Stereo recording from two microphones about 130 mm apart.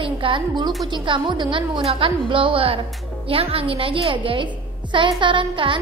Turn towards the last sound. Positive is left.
turn(degrees=-40)  # may be behind; listen again after turning